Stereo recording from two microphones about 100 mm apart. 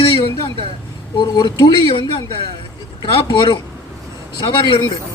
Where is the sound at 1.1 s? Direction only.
45° left (ahead or behind).